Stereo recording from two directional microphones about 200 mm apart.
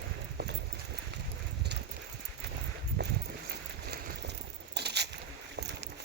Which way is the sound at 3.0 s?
55° right (ahead or behind).